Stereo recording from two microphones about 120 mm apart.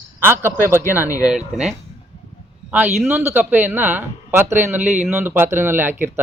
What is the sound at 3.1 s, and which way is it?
Speech, 20° right (ahead or behind).